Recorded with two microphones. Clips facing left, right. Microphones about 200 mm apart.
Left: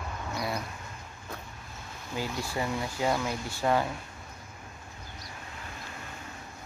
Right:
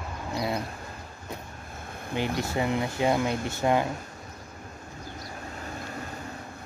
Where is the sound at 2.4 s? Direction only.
20° right (ahead or behind).